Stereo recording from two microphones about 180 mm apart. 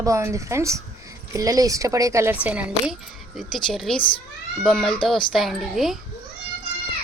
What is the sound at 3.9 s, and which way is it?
Speech, 30° left (ahead or behind).